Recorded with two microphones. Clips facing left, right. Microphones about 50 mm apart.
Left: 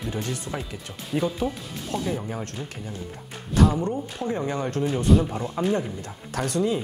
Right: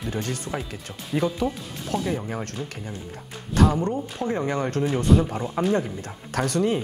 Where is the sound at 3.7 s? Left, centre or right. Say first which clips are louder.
Right 1 dB; right.